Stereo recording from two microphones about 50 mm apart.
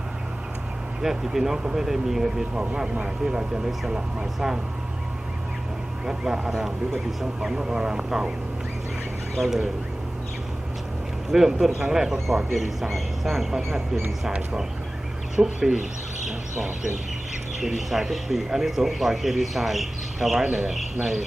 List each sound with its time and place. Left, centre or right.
1.0 s speech: centre
2.6 s speech: right
6.1 s speech: centre
9.4 s speech: centre
11.3 s speech: centre
15.4 s speech: centre
17.6 s speech: centre